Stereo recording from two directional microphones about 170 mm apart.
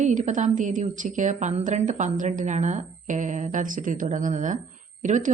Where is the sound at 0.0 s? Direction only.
45° right (ahead or behind).